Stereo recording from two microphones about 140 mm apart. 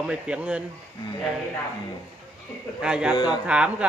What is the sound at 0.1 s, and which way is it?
Speech, 10° right (ahead or behind).